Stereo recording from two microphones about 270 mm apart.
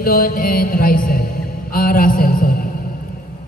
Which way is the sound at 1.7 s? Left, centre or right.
Left.